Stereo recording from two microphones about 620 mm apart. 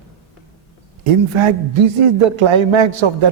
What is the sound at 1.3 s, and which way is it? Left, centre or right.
A man's voice, right.